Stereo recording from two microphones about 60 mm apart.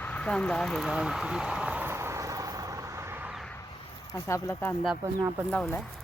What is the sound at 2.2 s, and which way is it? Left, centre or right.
Vehicle, right.